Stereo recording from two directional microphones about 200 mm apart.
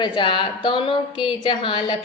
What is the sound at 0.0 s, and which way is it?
A woman's voice, 25° left (ahead or behind).